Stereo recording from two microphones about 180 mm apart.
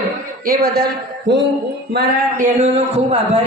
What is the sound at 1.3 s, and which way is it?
Speech, 70° right (ahead or behind).